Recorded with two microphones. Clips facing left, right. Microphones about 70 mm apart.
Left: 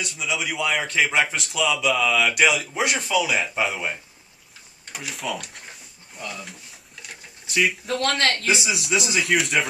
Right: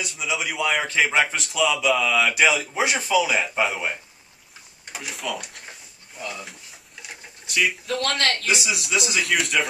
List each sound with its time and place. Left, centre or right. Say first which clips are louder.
0.0 s a man's voice: even; centre
7.5 s a man's voice: left 1 dB; centre
8.2 s a man's voice: left 1 dB; left
8.7 s a man's voice: left 1 dB; centre